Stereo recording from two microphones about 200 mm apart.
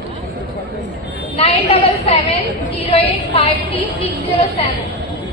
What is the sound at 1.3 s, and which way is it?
A woman's voice, 30° left (ahead or behind).